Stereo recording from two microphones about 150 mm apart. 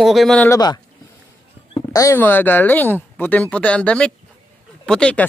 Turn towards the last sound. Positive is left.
turn(degrees=5)  # may be behind; listen again after turning